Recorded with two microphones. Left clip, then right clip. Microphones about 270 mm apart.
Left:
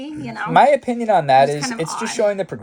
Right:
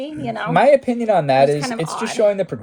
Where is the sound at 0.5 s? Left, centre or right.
Centre.